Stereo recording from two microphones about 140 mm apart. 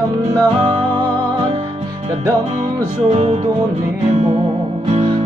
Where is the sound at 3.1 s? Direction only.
50° right (ahead or behind).